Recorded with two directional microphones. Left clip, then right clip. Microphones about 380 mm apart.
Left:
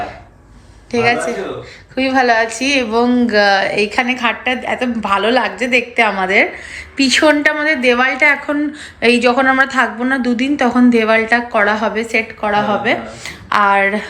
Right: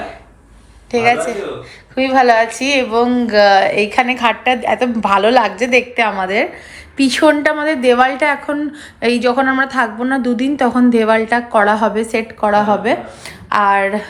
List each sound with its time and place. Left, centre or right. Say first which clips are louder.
0.9 s a woman's voice: right 1 dB; centre